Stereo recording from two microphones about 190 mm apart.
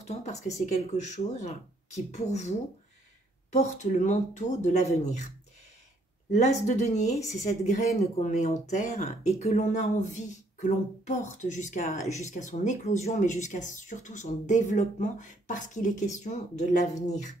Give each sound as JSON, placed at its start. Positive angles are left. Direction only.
{"t": 0.0, "sound": "speech", "side_deg": 35}
{"t": 3.5, "sound": "speech", "side_deg": 40}
{"t": 6.3, "sound": "speech", "side_deg": 40}